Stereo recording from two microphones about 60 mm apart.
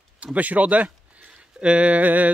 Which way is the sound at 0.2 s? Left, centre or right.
Right.